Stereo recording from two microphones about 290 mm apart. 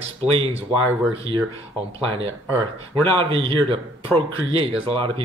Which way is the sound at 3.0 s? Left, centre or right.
Centre.